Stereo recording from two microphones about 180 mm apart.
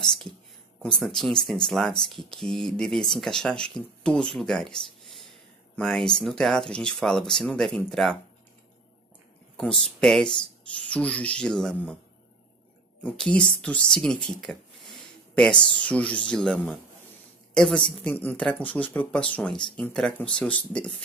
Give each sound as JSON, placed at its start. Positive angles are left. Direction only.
{"t": 0.8, "sound": "speech", "side_deg": 5}
{"t": 9.6, "sound": "speech", "side_deg": 5}
{"t": 13.0, "sound": "speech", "side_deg": 5}
{"t": 15.5, "sound": "speech", "side_deg": 25}
{"t": 15.8, "sound": "speech", "side_deg": 5}